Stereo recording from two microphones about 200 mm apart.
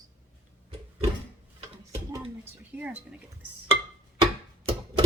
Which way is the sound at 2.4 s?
5° right (ahead or behind).